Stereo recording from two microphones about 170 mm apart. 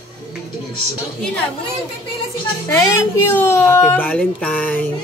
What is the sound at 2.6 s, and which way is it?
Speech, 15° left (ahead or behind).